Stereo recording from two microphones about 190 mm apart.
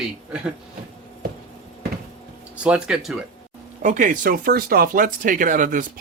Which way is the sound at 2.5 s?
5° right (ahead or behind).